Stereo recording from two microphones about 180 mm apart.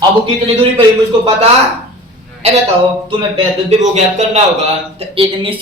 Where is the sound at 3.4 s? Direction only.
40° right (ahead or behind).